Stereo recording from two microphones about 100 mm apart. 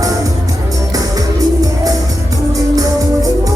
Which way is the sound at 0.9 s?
35° right (ahead or behind).